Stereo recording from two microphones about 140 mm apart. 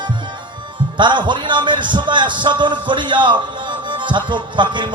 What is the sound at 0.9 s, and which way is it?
A man's voice, 35° right (ahead or behind).